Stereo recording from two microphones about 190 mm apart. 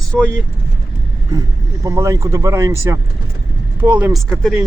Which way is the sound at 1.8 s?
15° right (ahead or behind).